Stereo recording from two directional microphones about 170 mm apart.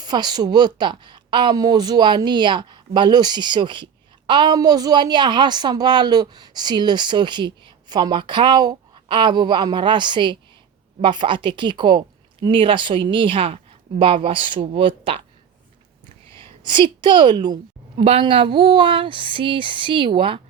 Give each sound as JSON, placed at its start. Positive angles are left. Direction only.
{"t": 0.0, "sound": "a woman's voice", "side_deg": -25}
{"t": 16.6, "sound": "a woman's voice", "side_deg": -30}